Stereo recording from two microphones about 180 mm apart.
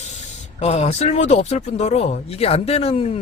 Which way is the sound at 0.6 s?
35° left (ahead or behind).